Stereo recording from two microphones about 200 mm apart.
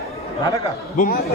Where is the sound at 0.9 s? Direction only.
40° left (ahead or behind).